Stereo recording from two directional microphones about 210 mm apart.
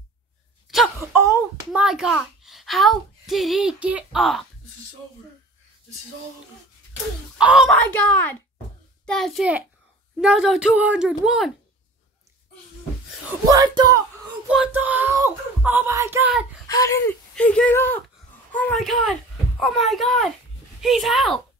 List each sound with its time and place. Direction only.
0.9 s a child's voice: 15° right (ahead or behind)
7.3 s speech: 5° right (ahead or behind)
13.5 s speech: 20° right (ahead or behind)
14.5 s speech: 5° right (ahead or behind)
16.6 s a child's voice: 15° left (ahead or behind); by 21.4 s centre (ahead or behind)